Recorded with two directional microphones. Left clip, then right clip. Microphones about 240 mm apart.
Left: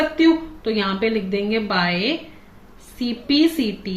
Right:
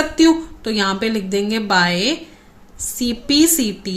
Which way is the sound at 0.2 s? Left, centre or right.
Right.